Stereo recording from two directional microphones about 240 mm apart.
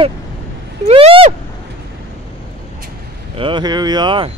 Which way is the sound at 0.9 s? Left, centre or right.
Right.